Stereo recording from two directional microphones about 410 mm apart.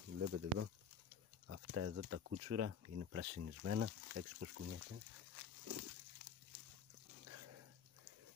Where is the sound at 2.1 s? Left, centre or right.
Right.